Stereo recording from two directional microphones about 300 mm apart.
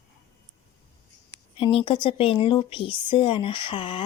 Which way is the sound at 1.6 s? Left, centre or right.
Centre.